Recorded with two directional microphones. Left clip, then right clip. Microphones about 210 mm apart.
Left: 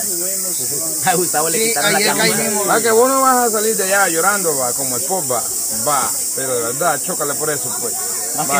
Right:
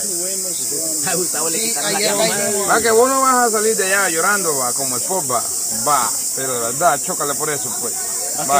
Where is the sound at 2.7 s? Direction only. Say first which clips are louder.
Left 1 dB; 25° right (ahead or behind).